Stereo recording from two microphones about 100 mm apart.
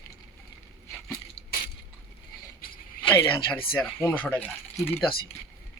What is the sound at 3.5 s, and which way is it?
Speech, 20° left (ahead or behind).